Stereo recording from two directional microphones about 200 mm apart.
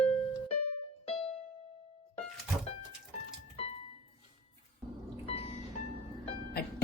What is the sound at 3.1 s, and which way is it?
Music, 30° left (ahead or behind).